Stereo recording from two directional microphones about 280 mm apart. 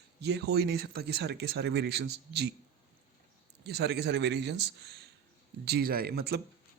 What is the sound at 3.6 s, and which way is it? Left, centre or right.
A man's voice, right.